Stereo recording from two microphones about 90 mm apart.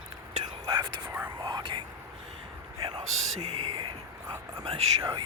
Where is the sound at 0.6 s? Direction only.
50° right (ahead or behind).